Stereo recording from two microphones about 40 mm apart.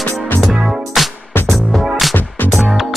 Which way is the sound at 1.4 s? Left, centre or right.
Centre.